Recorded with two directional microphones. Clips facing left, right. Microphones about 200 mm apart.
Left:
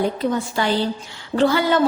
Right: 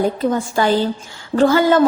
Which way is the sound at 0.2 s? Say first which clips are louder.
Right 4 dB; 45° right (ahead or behind).